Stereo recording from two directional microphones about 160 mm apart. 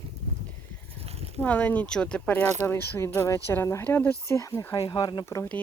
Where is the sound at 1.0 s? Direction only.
40° right (ahead or behind).